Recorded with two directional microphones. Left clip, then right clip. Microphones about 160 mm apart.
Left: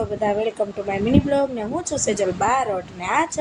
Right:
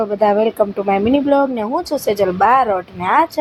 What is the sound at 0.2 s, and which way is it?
Speech, 25° right (ahead or behind).